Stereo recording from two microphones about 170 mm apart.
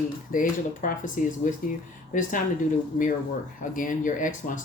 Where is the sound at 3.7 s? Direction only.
50° left (ahead or behind).